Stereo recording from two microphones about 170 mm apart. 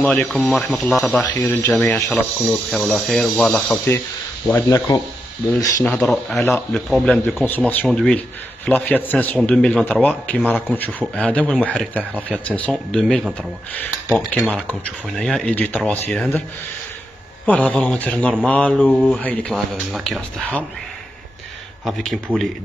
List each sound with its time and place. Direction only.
0.0 s speech: centre (ahead or behind)
1.2 s speech: 20° left (ahead or behind)
1.6 s speech: 10° left (ahead or behind)
4.6 s a man's voice: 20° left (ahead or behind)
5.9 s a man's voice: 5° left (ahead or behind)
17.5 s a man's voice: 10° left (ahead or behind)
21.8 s speech: centre (ahead or behind)